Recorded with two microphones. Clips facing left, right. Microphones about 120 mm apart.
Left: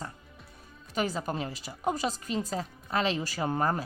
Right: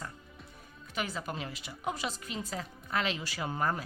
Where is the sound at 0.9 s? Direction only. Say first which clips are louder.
Left 6 dB; 40° left (ahead or behind).